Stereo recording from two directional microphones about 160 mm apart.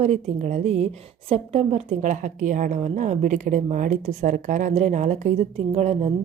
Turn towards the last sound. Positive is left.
turn(degrees=-45)  # may be behind; listen again after turning